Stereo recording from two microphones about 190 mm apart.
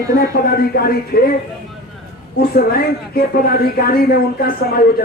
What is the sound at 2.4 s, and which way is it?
Speech, 55° left (ahead or behind).